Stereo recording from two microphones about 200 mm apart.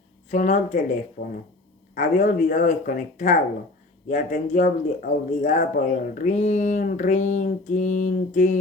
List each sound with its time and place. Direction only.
0.3 s speech: 35° left (ahead or behind)